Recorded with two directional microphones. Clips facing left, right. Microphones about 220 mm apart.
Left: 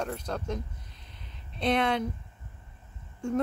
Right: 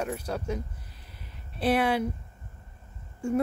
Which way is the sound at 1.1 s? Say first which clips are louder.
Right 1 dB; 5° right (ahead or behind).